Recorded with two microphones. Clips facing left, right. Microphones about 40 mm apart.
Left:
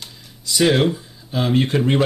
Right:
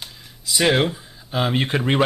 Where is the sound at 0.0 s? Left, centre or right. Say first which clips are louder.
Even; centre.